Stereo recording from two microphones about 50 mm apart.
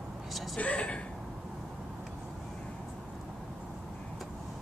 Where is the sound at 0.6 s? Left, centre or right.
Left.